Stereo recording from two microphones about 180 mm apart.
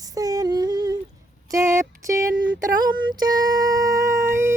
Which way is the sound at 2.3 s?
90° right.